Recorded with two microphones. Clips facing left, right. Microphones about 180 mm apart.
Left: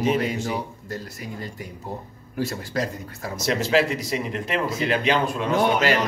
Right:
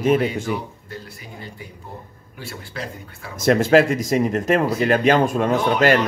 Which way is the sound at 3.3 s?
50° right (ahead or behind).